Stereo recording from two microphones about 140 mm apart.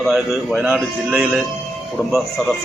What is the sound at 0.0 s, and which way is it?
A man's voice, centre (ahead or behind).